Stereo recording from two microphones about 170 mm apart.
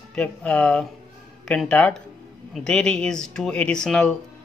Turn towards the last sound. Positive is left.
turn(degrees=5)  # may be behind; listen again after turning